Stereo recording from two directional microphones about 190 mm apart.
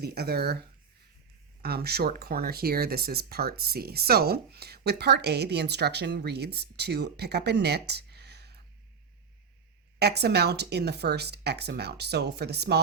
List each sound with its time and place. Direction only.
0.0 s speech: 55° right (ahead or behind)
1.6 s speech: 55° right (ahead or behind)
10.0 s speech: 60° right (ahead or behind)